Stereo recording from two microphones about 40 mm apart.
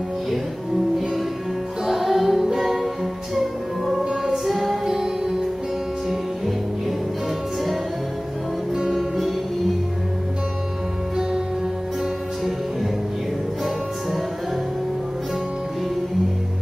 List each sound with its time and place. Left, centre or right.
1.9 s music: centre
4.0 s music: centre
4.5 s music: centre
4.8 s music: centre
8.7 s music: centre